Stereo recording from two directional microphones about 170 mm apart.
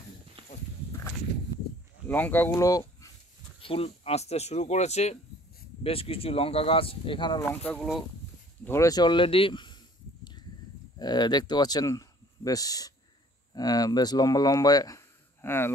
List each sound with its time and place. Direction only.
0.4 s a sound: 30° right (ahead or behind)
2.0 s speech: 10° left (ahead or behind)
3.6 s speech: 35° left (ahead or behind)
7.4 s speech: 5° left (ahead or behind)
8.6 s speech: 20° left (ahead or behind)
11.0 s speech: 25° left (ahead or behind)